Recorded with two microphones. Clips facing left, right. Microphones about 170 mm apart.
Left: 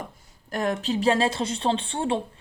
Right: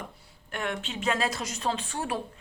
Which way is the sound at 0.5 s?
35° left (ahead or behind).